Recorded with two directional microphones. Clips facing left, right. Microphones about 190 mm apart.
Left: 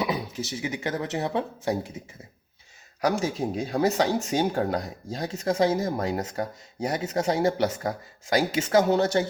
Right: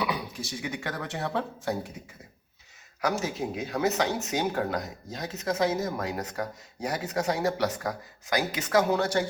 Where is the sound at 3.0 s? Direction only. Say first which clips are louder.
Left 4 dB; 30° left (ahead or behind).